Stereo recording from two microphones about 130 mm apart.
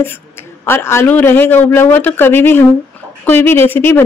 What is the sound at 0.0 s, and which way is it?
A man's voice, 15° left (ahead or behind).